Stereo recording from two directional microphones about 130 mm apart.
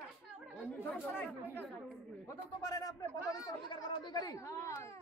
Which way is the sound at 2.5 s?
25° left (ahead or behind).